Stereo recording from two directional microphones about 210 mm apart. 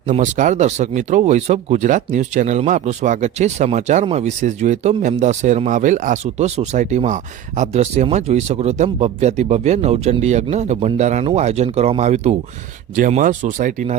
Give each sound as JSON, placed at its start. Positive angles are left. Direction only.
{"t": 0.1, "sound": "speech", "side_deg": -35}